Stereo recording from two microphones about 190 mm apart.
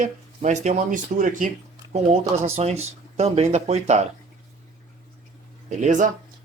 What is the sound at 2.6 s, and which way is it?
A man's voice, 35° right (ahead or behind).